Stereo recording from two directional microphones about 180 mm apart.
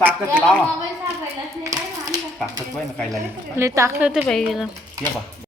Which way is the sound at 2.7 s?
Centre (ahead or behind).